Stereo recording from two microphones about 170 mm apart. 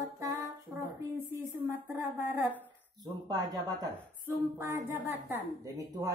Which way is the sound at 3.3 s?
20° right (ahead or behind).